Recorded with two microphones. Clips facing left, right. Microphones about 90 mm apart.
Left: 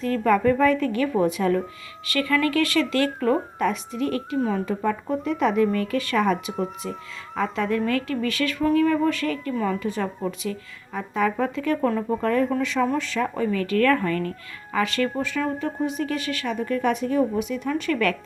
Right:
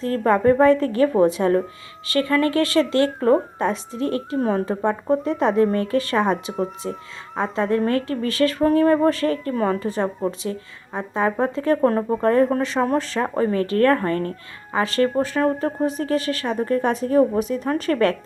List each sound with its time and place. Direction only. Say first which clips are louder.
0.0 s speech: right 2 dB; 35° right (ahead or behind)